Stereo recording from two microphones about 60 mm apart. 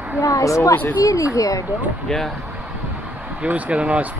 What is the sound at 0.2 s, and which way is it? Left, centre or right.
Speech, left.